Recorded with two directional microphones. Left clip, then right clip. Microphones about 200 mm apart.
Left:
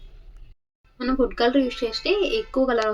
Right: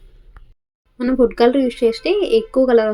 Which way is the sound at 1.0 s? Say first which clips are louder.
Right 7 dB; 25° right (ahead or behind).